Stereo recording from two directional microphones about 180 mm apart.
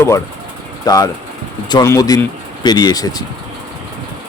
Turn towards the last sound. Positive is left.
turn(degrees=20)  # may be behind; listen again after turning